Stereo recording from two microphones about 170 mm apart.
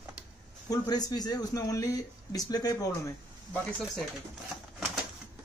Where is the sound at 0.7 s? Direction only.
20° left (ahead or behind).